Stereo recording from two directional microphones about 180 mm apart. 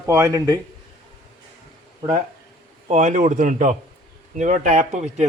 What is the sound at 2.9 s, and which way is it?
A man's voice, 45° right (ahead or behind).